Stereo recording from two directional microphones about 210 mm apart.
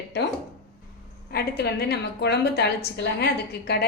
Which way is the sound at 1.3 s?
50° left (ahead or behind).